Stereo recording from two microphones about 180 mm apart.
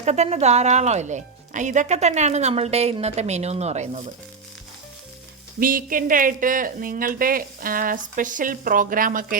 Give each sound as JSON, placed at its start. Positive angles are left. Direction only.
{"t": 0.0, "sound": "speech", "side_deg": -40}
{"t": 5.5, "sound": "speech", "side_deg": -50}